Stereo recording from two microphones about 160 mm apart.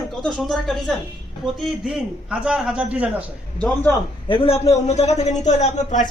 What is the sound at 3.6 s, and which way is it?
Speech, 5° left (ahead or behind).